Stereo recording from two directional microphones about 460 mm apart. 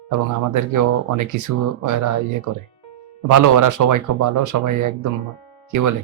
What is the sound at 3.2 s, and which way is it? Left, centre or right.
A man's voice, right.